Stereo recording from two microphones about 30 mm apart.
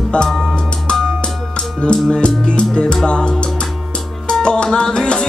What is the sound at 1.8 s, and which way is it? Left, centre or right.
Music, left.